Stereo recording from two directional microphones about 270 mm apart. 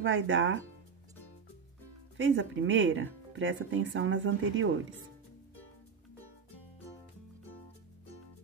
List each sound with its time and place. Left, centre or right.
0.0 s speech: right
2.1 s speech: right